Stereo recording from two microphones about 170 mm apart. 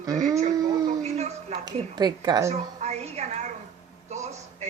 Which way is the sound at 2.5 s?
40° right (ahead or behind).